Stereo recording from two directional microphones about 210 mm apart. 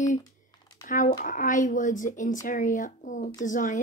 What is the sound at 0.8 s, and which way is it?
Speech, 40° left (ahead or behind).